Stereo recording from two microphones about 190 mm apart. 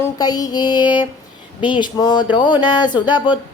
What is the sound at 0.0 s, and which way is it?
Speech, 20° left (ahead or behind).